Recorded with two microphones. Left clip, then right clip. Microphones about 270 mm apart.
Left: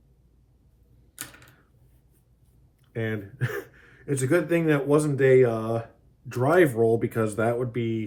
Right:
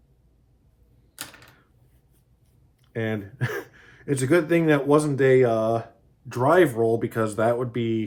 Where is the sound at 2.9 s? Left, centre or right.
Right.